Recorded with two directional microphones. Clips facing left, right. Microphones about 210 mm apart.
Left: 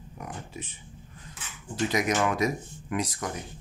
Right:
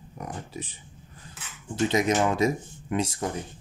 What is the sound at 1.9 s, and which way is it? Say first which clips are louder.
Speech: right 2 dB; 25° right (ahead or behind).